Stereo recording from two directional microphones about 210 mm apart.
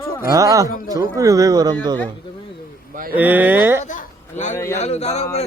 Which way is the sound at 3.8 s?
35° left (ahead or behind).